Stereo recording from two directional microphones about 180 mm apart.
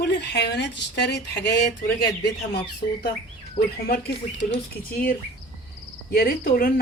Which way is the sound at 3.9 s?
70° left (ahead or behind).